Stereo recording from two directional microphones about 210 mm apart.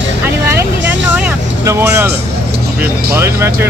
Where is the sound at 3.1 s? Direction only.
10° right (ahead or behind).